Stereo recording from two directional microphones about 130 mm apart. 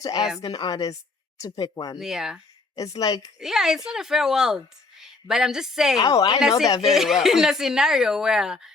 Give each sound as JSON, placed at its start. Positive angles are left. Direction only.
{"t": 0.0, "sound": "speech", "side_deg": 30}
{"t": 2.0, "sound": "a woman's voice", "side_deg": -5}
{"t": 2.7, "sound": "speech", "side_deg": 25}
{"t": 3.4, "sound": "a woman's voice", "side_deg": -5}
{"t": 6.0, "sound": "speech", "side_deg": 30}
{"t": 6.8, "sound": "a woman's voice", "side_deg": 0}